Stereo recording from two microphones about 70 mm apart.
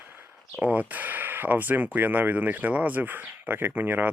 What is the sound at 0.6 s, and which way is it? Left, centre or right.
Speech, right.